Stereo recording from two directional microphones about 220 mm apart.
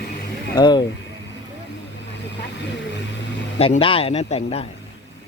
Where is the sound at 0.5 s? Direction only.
20° left (ahead or behind).